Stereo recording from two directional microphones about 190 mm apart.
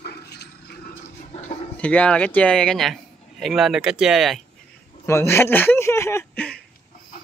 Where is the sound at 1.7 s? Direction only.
5° left (ahead or behind).